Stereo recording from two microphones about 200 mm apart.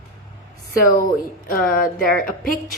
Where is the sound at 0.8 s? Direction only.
45° left (ahead or behind).